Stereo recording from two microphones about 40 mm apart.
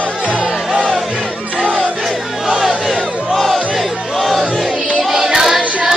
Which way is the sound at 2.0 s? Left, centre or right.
Centre.